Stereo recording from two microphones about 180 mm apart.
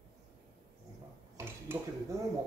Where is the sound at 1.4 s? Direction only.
15° right (ahead or behind).